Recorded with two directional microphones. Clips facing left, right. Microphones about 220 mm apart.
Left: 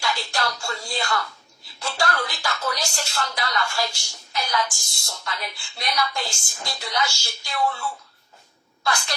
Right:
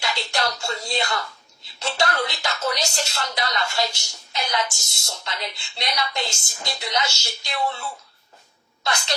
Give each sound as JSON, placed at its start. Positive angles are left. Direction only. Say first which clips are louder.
{"t": 0.0, "sound": "a woman's voice", "louder": "right 1 dB", "side_deg": -20}